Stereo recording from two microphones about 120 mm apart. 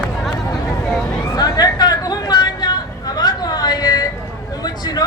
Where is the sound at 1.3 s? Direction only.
35° left (ahead or behind).